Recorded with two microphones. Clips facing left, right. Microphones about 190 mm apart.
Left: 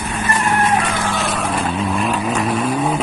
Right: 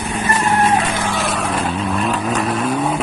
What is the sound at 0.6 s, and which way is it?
Vehicle, 20° right (ahead or behind).